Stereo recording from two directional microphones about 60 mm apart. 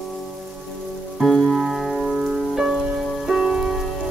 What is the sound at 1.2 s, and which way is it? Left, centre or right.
Music, centre.